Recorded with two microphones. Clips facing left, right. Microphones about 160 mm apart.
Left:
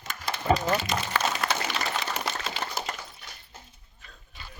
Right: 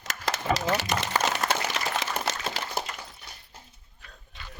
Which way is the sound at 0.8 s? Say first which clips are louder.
Right 1 dB; 80° right.